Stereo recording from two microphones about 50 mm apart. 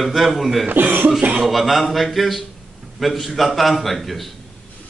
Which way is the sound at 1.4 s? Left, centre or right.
Centre.